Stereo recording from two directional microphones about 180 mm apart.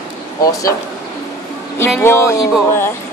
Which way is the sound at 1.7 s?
15° left (ahead or behind).